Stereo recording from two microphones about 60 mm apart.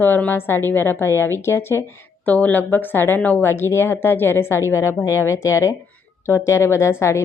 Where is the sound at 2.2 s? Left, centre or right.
Left.